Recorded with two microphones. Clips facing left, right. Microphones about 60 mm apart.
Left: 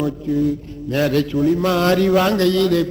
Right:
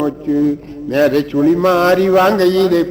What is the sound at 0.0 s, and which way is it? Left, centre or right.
A man's voice, right.